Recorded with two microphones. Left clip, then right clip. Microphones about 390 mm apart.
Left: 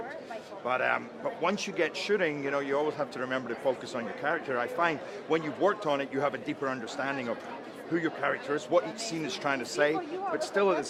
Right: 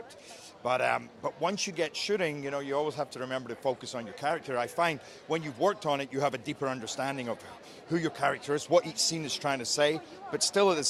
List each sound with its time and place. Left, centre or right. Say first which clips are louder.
0.6 s a man's voice: right 1 dB; right